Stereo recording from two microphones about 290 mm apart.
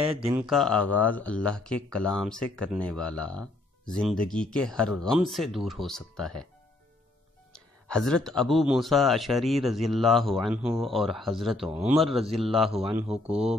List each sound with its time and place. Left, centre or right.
0.2 s speech: centre
7.5 s speech: centre